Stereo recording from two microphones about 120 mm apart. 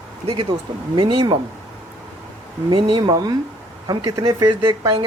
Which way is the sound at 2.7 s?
45° right (ahead or behind).